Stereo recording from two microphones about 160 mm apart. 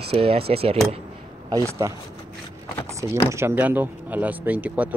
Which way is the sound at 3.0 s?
15° right (ahead or behind).